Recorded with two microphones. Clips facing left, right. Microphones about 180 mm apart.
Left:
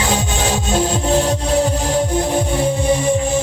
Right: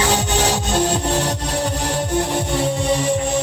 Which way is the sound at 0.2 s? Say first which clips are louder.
Even; 70° right (ahead or behind).